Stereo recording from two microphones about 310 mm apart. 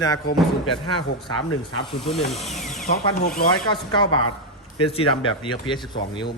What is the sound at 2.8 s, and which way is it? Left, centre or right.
Speech, left.